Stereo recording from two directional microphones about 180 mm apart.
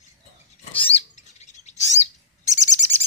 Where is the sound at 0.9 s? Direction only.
40° left (ahead or behind).